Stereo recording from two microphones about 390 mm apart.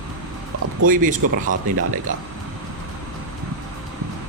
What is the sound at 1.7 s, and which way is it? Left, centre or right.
Speech, right.